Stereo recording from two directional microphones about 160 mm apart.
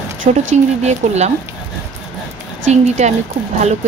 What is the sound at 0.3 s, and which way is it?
Speech, 50° right (ahead or behind).